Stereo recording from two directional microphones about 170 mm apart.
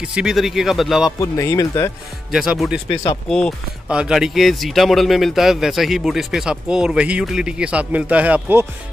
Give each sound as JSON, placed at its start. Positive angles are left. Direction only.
{"t": 0.0, "sound": "speech", "side_deg": -5}
{"t": 1.2, "sound": "speech", "side_deg": 20}
{"t": 2.3, "sound": "speech", "side_deg": 0}
{"t": 2.9, "sound": "speech", "side_deg": 35}
{"t": 3.3, "sound": "speech", "side_deg": 5}